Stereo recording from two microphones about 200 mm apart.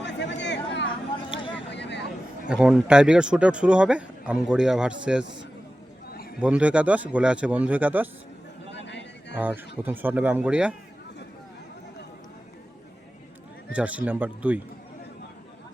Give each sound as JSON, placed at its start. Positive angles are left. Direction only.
{"t": 0.0, "sound": "a sound", "side_deg": 60}
{"t": 1.7, "sound": "vehicle", "side_deg": 60}
{"t": 2.5, "sound": "speech", "side_deg": -5}
{"t": 6.4, "sound": "a man's voice", "side_deg": -5}
{"t": 8.7, "sound": "a sound", "side_deg": 60}
{"t": 9.4, "sound": "a man's voice", "side_deg": -10}
{"t": 13.7, "sound": "a man's voice", "side_deg": -5}